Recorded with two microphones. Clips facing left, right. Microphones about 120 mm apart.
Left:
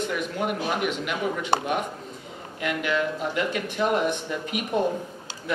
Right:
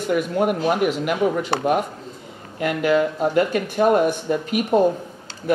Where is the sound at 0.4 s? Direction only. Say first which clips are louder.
Right 6 dB; 50° right (ahead or behind).